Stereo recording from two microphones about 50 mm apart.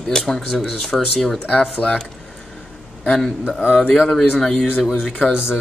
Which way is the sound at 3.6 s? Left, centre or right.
Left.